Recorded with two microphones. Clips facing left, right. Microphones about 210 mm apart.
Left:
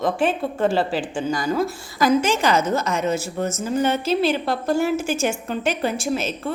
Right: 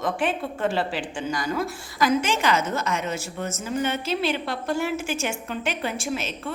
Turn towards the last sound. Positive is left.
turn(degrees=40)  # may be behind; listen again after turning